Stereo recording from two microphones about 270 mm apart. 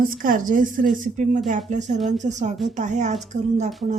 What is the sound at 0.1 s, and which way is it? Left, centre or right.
A woman's voice, right.